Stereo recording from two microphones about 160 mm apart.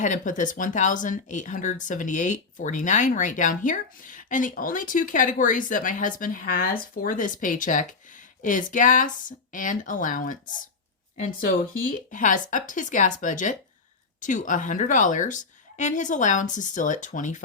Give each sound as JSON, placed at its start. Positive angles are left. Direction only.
{"t": 0.0, "sound": "speech", "side_deg": 50}
{"t": 12.1, "sound": "speech", "side_deg": 55}